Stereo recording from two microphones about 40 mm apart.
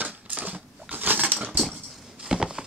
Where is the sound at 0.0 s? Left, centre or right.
Right.